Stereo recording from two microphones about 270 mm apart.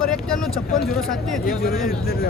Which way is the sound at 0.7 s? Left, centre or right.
Left.